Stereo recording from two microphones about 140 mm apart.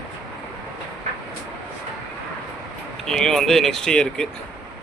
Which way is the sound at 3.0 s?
5° left (ahead or behind).